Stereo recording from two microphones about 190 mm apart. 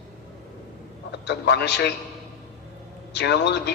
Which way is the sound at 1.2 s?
60° left (ahead or behind).